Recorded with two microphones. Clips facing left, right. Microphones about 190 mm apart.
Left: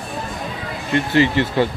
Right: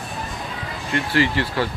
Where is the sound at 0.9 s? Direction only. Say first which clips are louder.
Left 4 dB; 20° left (ahead or behind).